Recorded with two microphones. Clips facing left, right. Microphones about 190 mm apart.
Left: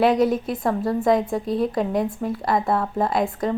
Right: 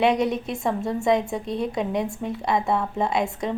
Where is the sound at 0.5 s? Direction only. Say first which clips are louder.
Left 2 dB; 25° right (ahead or behind).